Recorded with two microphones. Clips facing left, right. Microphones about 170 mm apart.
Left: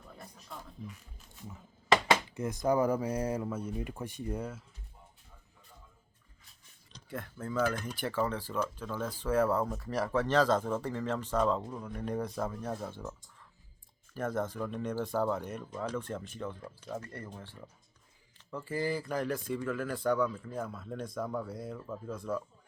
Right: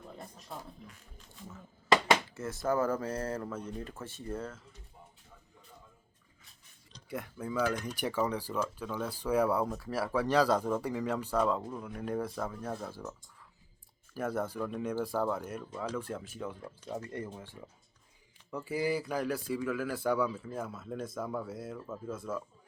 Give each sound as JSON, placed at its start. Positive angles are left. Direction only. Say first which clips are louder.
{"t": 2.3, "sound": "speech", "louder": "left 2 dB", "side_deg": 15}
{"t": 7.1, "sound": "a man's voice", "louder": "right 1 dB", "side_deg": -15}
{"t": 16.9, "sound": "a man's voice", "louder": "right 3 dB", "side_deg": -20}